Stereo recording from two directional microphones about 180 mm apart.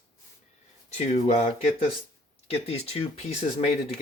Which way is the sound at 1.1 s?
35° left (ahead or behind).